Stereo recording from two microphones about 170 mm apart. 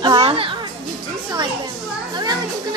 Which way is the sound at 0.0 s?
30° right (ahead or behind).